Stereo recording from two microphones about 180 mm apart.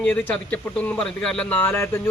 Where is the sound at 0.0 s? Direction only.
5° left (ahead or behind).